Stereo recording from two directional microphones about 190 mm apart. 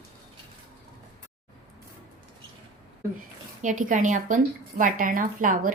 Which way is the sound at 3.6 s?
45° right (ahead or behind).